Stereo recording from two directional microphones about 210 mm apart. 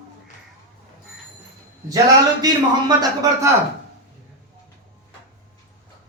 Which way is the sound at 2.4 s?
20° right (ahead or behind).